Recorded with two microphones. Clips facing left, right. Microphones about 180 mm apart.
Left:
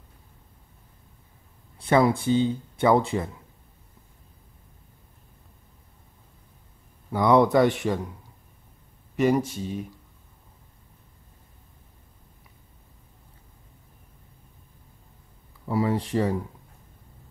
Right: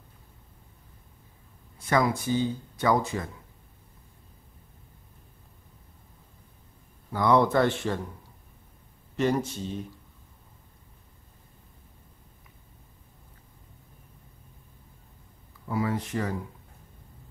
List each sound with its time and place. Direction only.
1.8 s speech: 30° left (ahead or behind)
7.1 s speech: 20° left (ahead or behind)
9.1 s speech: 10° left (ahead or behind)
15.7 s speech: 30° left (ahead or behind)